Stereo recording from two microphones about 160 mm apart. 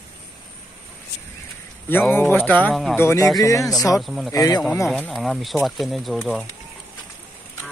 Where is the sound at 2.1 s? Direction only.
10° left (ahead or behind).